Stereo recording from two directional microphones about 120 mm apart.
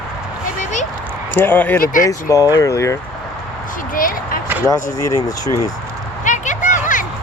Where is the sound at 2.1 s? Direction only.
25° left (ahead or behind).